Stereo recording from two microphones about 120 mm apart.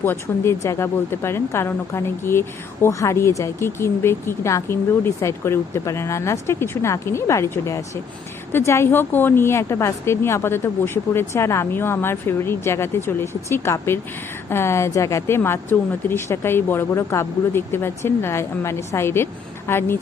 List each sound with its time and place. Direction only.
0.0 s a woman's voice: 20° left (ahead or behind)